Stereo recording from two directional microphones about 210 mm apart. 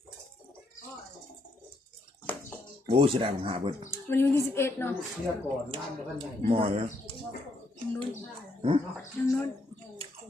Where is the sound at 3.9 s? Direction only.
10° left (ahead or behind).